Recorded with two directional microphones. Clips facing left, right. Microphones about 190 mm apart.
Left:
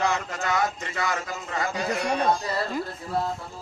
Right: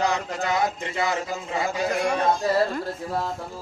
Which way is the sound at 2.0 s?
45° right (ahead or behind).